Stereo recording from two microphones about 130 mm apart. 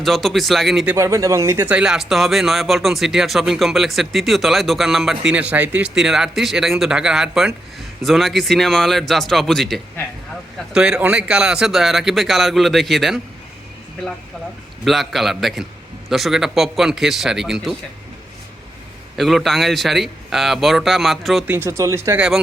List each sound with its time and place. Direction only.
0.0 s speech: centre (ahead or behind)
0.9 s speech: 20° right (ahead or behind); by 13.2 s centre (ahead or behind)
14.8 s speech: centre (ahead or behind)
19.1 s speech: centre (ahead or behind)
21.4 s speech: 15° right (ahead or behind)